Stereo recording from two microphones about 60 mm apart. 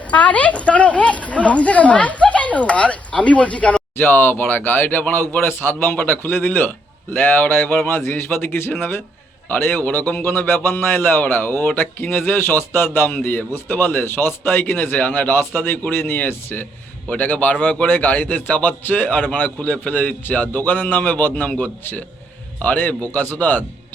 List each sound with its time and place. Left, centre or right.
0.1 s a man's voice: left
3.9 s a man's voice: left